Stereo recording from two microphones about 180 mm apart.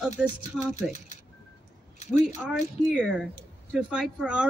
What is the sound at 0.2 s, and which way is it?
Speech, 5° right (ahead or behind).